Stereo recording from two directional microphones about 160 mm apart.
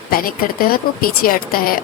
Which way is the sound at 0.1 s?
65° left (ahead or behind).